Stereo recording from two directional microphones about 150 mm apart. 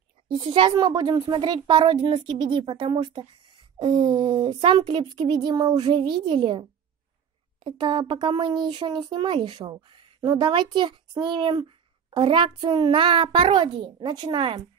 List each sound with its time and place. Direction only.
0.3 s a woman's voice: 35° right (ahead or behind)
7.6 s a woman's voice: 30° right (ahead or behind)